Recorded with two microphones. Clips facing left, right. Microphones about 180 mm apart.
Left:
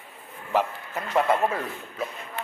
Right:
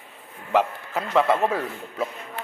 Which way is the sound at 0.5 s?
75° right (ahead or behind).